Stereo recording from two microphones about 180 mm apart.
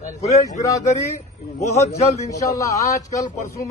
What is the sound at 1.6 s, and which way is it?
Speech, 40° left (ahead or behind).